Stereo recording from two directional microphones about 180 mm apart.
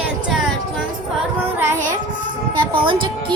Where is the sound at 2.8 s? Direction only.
25° right (ahead or behind).